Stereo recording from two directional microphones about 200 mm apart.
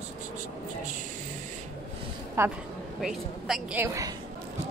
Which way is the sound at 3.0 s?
Centre (ahead or behind).